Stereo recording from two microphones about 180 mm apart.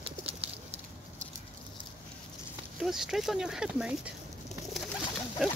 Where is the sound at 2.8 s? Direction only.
Centre (ahead or behind).